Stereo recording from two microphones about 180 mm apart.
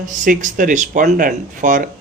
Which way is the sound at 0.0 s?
45° right (ahead or behind).